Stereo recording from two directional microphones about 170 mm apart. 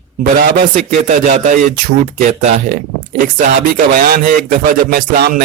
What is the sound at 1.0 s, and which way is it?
Speech, 45° right (ahead or behind).